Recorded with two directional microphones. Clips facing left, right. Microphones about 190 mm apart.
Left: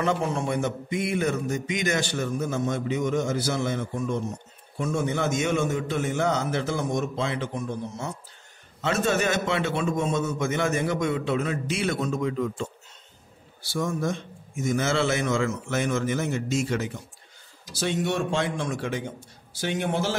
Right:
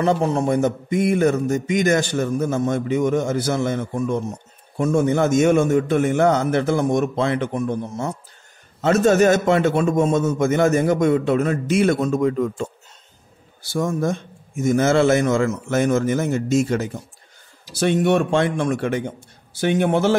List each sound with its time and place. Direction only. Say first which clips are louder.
0.0 s a man's voice: right 7 dB; 35° right (ahead or behind); by 8.1 s 55° right (ahead or behind)
8.8 s a man's voice: right 9 dB; 45° right (ahead or behind)
17.7 s a man's voice: right 9 dB; 60° right (ahead or behind)